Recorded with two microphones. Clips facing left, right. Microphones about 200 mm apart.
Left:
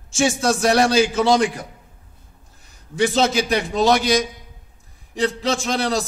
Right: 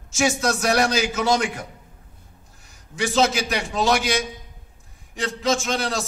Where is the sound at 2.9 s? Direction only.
35° left (ahead or behind).